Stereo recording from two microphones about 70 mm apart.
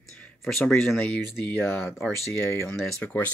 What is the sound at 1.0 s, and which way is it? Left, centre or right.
Speech, left.